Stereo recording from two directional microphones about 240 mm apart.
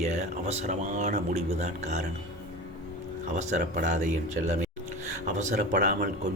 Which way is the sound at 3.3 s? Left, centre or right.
Right.